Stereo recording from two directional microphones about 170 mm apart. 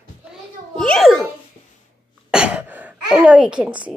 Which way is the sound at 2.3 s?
5° right (ahead or behind).